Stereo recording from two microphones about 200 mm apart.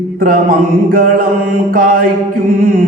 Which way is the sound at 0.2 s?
45° right (ahead or behind).